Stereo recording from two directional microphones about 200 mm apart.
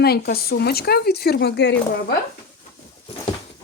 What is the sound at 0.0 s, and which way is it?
Speech, 50° left (ahead or behind).